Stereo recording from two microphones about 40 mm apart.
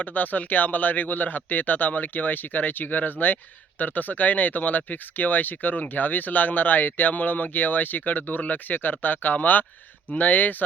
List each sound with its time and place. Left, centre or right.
0.0 s speech: left